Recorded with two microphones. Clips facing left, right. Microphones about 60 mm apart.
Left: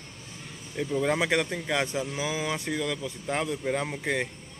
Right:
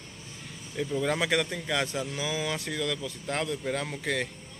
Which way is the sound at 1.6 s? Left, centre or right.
Centre.